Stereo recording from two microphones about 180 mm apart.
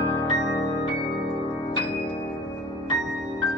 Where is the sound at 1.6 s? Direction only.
30° left (ahead or behind).